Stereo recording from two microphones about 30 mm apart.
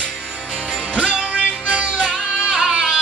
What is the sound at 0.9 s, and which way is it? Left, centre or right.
Music, right.